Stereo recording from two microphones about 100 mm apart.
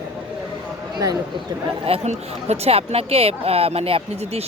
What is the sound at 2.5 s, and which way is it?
Speech, 90° right.